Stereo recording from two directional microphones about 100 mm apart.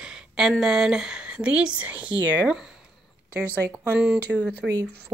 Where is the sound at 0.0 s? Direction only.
5° right (ahead or behind).